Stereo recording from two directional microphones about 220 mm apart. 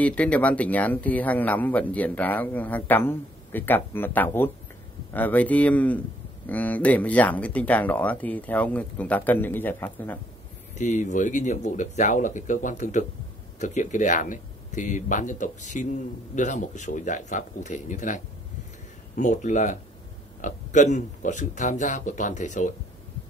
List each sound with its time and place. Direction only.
0.0 s speech: 5° left (ahead or behind)
10.7 s speech: 35° left (ahead or behind)